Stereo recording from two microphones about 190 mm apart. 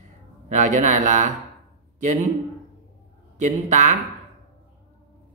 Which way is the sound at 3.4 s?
40° right (ahead or behind).